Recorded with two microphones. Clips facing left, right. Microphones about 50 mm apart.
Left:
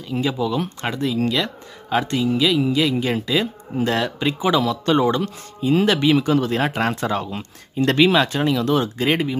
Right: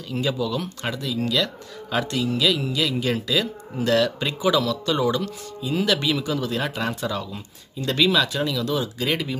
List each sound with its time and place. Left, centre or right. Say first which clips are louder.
0.0 s speech: left 3 dB; centre
0.9 s speech: left 3 dB; left